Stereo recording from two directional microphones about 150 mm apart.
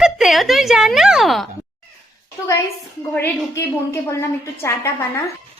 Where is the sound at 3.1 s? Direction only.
15° left (ahead or behind).